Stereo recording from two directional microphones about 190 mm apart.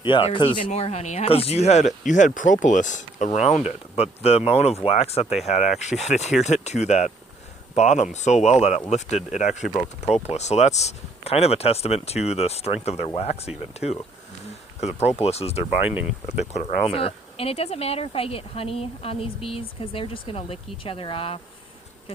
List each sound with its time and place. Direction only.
0.0 s speech: 30° left (ahead or behind)